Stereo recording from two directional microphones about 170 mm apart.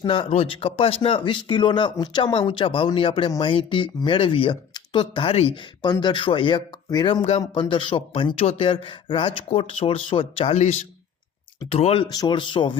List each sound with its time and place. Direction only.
0.0 s speech: 30° left (ahead or behind)